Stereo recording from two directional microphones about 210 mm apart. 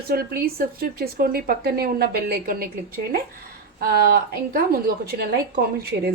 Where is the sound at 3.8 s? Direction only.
45° right (ahead or behind).